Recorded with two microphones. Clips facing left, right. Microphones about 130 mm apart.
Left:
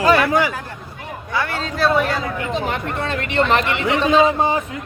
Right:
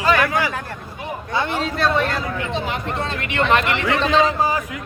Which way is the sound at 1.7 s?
5° left (ahead or behind).